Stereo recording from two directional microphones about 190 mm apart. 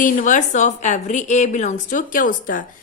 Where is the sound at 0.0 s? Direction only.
45° left (ahead or behind).